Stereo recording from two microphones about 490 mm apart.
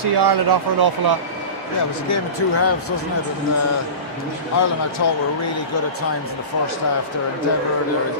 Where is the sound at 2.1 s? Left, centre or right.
Left.